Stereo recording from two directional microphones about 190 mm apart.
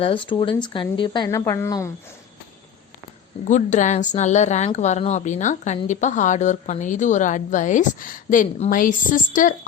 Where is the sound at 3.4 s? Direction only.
40° left (ahead or behind).